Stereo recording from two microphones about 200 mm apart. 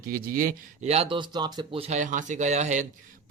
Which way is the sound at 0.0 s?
45° right (ahead or behind).